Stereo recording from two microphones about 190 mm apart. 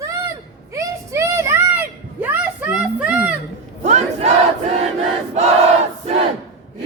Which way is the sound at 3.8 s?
40° right (ahead or behind).